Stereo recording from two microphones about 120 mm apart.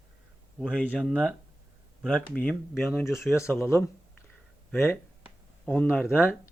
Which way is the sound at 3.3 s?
20° left (ahead or behind).